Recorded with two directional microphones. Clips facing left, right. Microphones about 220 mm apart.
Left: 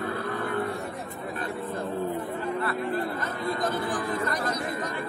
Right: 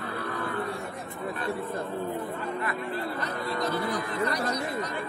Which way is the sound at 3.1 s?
50° left (ahead or behind).